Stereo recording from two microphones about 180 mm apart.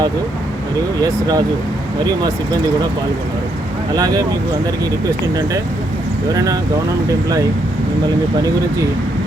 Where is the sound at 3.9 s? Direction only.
20° right (ahead or behind).